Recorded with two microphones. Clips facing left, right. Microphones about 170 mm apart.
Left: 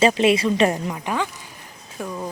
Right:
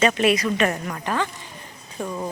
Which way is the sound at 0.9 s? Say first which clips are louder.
Even; 10° left (ahead or behind).